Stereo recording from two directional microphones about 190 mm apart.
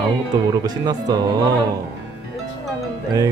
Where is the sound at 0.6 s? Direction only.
20° right (ahead or behind).